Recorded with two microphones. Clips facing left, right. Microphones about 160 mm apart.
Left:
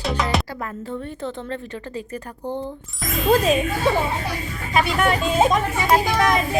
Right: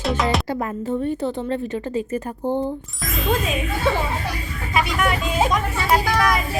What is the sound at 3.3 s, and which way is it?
Speech, 35° left (ahead or behind).